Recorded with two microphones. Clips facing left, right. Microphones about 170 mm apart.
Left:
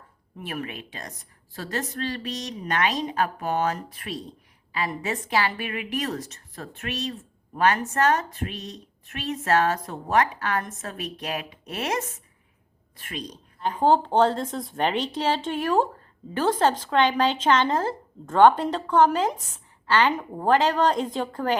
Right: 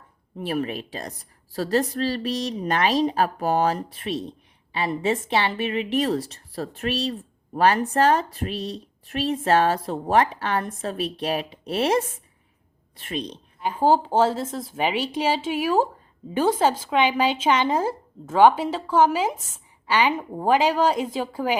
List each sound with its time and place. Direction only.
0.3 s a woman's voice: 30° right (ahead or behind)
13.6 s speech: 5° right (ahead or behind)